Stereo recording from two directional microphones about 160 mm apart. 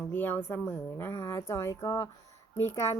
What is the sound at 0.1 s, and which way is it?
Speech, 10° left (ahead or behind).